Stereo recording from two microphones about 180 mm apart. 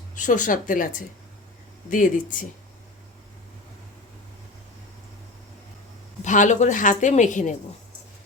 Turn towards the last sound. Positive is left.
turn(degrees=45)  # may be behind; listen again after turning